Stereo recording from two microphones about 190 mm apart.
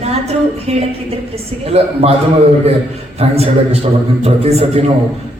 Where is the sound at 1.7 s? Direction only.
30° right (ahead or behind).